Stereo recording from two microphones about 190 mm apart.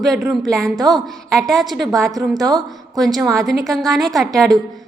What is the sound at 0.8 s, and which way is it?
Speech, 20° right (ahead or behind).